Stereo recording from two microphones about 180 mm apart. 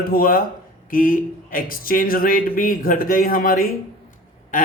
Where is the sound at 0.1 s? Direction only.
50° left (ahead or behind).